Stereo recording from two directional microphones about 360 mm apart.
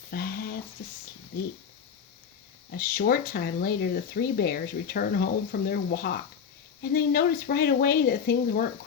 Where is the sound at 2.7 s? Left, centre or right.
Left.